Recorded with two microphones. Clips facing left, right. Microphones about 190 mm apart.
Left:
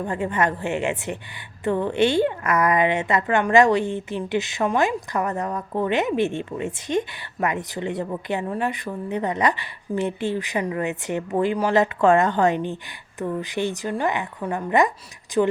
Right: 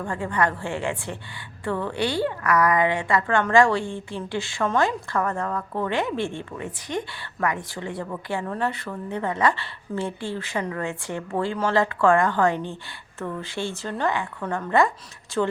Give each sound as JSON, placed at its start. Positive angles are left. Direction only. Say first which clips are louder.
{"t": 0.0, "sound": "a woman's voice", "louder": "left 2 dB", "side_deg": 20}